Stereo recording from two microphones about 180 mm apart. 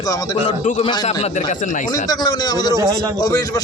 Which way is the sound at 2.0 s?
25° left (ahead or behind).